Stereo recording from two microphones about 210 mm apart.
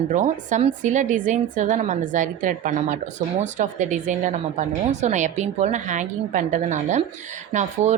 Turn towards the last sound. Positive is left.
turn(degrees=-35)  # may be behind; listen again after turning